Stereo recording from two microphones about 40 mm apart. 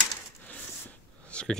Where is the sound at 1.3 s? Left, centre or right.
Left.